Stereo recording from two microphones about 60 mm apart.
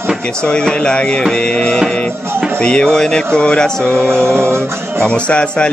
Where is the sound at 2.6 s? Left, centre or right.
Centre.